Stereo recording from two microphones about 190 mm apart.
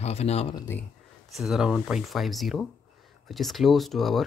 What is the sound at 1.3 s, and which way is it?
Speech, centre (ahead or behind).